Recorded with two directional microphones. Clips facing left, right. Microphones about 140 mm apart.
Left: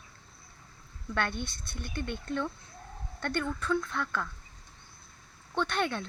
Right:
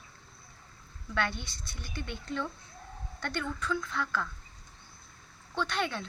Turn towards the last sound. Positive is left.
turn(degrees=55)  # may be behind; listen again after turning